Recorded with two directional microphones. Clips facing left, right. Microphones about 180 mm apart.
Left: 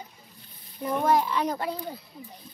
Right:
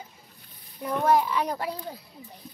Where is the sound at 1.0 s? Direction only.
10° right (ahead or behind).